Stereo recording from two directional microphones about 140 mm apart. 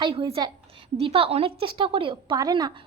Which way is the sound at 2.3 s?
30° right (ahead or behind).